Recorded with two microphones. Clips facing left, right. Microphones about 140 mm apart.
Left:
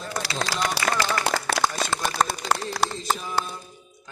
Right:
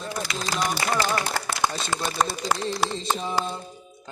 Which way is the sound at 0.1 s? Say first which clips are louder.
Left 2 dB; 80° left.